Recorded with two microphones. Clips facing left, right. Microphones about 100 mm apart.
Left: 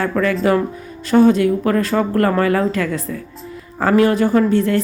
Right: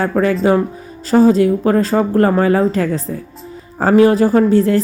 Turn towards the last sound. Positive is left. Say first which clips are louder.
# right 3 dB
turn(degrees=-35)  # may be behind; listen again after turning